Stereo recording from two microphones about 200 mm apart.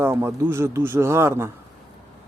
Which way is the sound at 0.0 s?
15° right (ahead or behind).